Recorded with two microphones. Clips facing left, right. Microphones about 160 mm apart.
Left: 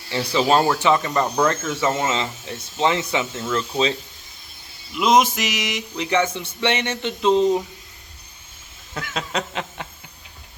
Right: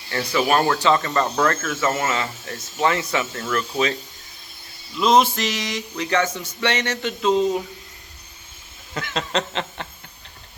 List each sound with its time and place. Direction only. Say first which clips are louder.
0.1 s speech: left 2 dB; 15° left (ahead or behind)
4.9 s speech: even; 15° left (ahead or behind)
9.0 s speech: right 2 dB; 5° left (ahead or behind)